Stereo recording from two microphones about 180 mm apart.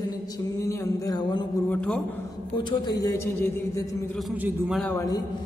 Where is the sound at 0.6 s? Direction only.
20° left (ahead or behind).